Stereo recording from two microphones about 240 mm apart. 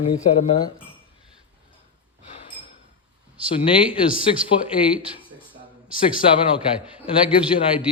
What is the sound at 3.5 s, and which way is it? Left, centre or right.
Speech, left.